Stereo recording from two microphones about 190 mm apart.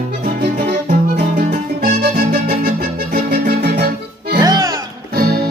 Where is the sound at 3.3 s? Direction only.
60° right (ahead or behind).